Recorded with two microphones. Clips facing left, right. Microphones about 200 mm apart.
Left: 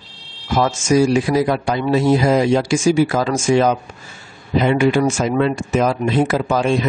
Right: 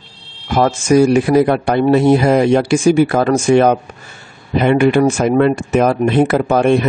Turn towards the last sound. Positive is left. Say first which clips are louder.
# right 5 dB
turn(degrees=-60)  # may be behind; listen again after turning